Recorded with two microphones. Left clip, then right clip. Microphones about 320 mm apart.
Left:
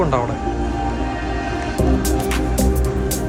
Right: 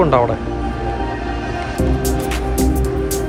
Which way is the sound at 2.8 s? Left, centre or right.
Centre.